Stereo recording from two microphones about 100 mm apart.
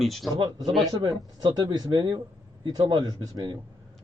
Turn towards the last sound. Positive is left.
turn(degrees=-45)  # may be behind; listen again after turning